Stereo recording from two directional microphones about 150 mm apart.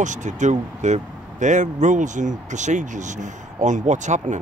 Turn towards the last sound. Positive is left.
turn(degrees=-55)  # may be behind; listen again after turning